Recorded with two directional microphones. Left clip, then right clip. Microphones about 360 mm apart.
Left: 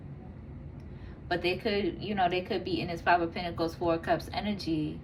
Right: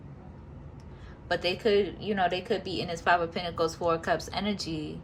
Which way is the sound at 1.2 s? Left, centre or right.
Centre.